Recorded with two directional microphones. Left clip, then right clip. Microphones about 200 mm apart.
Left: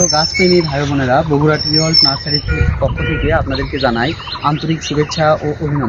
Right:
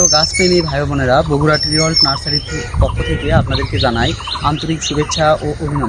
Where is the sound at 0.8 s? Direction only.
15° right (ahead or behind).